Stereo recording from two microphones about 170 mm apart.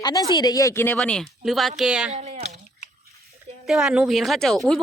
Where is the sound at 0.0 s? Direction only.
25° left (ahead or behind).